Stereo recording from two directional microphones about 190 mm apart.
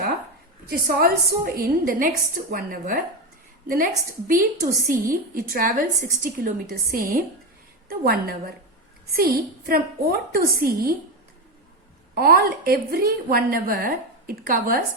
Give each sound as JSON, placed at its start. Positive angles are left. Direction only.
{"t": 0.7, "sound": "a woman's voice", "side_deg": -50}
{"t": 4.3, "sound": "a woman's voice", "side_deg": -45}
{"t": 12.1, "sound": "a woman's voice", "side_deg": -55}